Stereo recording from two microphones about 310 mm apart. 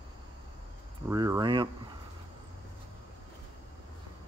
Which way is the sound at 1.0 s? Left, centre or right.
Centre.